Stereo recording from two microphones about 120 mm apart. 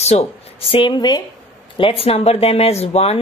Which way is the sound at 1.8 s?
50° left (ahead or behind).